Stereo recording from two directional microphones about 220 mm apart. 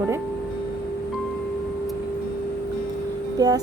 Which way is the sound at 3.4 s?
15° right (ahead or behind).